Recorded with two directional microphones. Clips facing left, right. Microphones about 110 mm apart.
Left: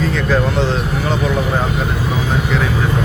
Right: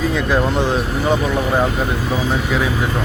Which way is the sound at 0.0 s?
15° right (ahead or behind).